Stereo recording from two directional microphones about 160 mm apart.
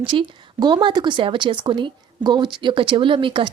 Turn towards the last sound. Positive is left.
turn(degrees=-30)  # may be behind; listen again after turning